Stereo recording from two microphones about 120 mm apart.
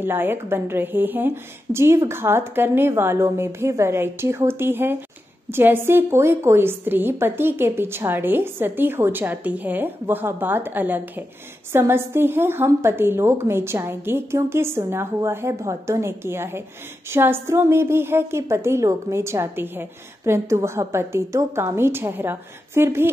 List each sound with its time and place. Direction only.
0.0 s a woman's voice: 20° right (ahead or behind)